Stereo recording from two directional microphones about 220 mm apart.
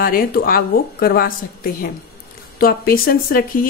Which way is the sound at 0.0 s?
40° left (ahead or behind).